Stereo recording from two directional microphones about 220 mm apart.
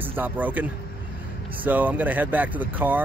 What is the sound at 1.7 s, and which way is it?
Speech, 10° right (ahead or behind).